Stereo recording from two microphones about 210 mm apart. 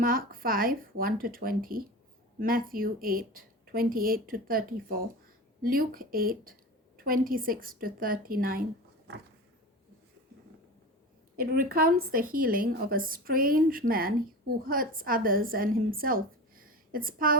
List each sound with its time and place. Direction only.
0.0 s a woman's voice: 45° right (ahead or behind)
11.3 s a woman's voice: 45° right (ahead or behind)